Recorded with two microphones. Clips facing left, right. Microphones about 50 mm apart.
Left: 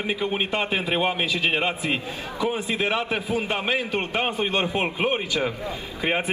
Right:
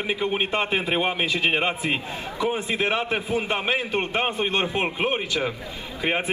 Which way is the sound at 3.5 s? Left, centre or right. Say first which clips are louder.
Right 1 dB; centre.